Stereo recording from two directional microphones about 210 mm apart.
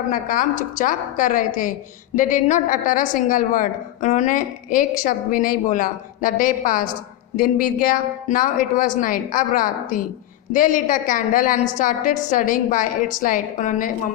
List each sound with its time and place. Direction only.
0.1 s a woman's voice: 40° left (ahead or behind)